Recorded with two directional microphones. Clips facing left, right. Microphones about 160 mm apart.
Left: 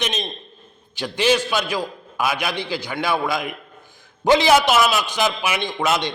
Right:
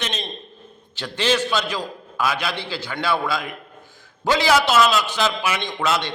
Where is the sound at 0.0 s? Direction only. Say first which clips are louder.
Left 3 dB; 15° left (ahead or behind).